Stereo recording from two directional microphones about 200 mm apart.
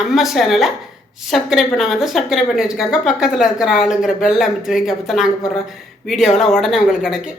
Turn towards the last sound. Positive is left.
turn(degrees=0)  # may be behind; listen again after turning